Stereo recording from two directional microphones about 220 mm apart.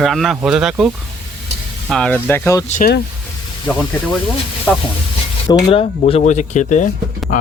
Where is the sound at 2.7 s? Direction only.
40° left (ahead or behind).